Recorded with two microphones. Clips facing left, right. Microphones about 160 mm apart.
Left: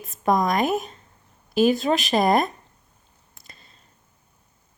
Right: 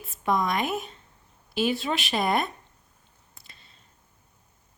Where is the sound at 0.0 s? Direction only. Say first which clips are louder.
Left 5 dB; 40° left (ahead or behind).